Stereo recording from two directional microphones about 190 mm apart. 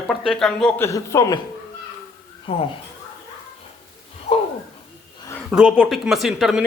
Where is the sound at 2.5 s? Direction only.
30° left (ahead or behind).